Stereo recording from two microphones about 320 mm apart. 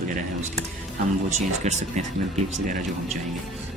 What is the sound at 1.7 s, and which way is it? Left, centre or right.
Speech, right.